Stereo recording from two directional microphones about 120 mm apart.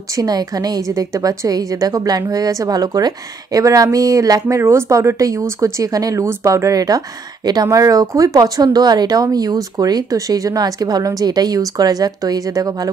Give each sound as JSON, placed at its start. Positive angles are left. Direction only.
{"t": 0.1, "sound": "a woman's voice", "side_deg": -30}